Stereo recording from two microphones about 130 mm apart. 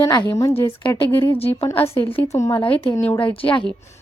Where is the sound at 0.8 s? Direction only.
15° left (ahead or behind).